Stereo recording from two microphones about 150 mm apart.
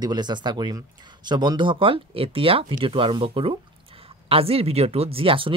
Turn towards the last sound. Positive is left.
turn(degrees=-35)  # may be behind; listen again after turning